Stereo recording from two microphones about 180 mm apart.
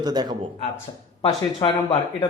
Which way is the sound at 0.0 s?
20° right (ahead or behind).